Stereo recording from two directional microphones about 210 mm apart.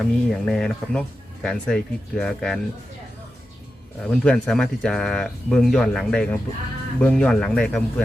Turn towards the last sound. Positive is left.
turn(degrees=5)  # may be behind; listen again after turning